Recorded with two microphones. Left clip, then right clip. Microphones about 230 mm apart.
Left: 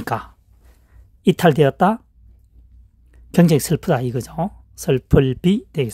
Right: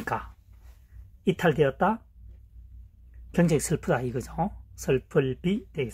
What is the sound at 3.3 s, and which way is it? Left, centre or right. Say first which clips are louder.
Speech: left 8 dB; left.